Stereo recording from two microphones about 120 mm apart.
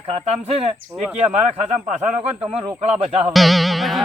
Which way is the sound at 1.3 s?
55° right (ahead or behind).